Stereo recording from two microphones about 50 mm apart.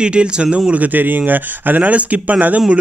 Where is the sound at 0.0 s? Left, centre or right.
Right.